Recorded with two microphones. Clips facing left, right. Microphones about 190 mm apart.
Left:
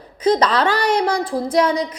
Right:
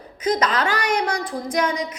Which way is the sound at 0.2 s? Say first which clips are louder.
Left 5 dB; 30° left (ahead or behind).